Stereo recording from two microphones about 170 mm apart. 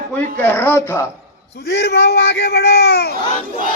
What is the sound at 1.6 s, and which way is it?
Speech, 80° left.